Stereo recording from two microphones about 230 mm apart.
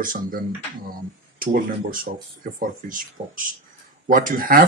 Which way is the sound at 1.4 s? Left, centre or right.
Right.